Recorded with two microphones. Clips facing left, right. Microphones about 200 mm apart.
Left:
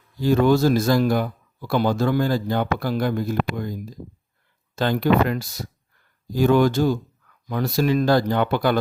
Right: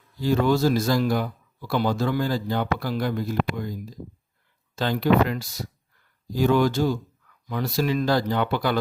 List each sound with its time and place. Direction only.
0.2 s a man's voice: 50° left (ahead or behind)